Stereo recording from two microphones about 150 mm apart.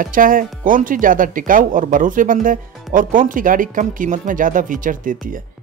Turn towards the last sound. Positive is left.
turn(degrees=-65)  # may be behind; listen again after turning